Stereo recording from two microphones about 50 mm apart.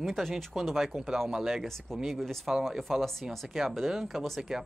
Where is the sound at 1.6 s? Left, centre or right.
Centre.